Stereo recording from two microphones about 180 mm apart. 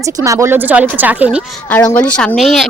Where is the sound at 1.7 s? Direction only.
10° left (ahead or behind).